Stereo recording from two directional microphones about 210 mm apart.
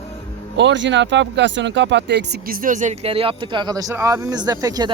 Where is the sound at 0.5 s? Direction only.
60° right (ahead or behind).